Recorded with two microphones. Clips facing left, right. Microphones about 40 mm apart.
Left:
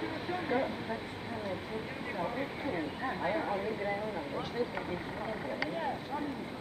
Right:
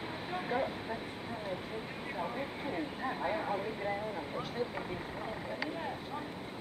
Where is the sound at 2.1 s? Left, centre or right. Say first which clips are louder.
Left 2 dB; centre.